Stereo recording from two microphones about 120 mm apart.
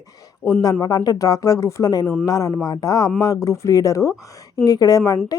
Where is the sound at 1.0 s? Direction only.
30° left (ahead or behind).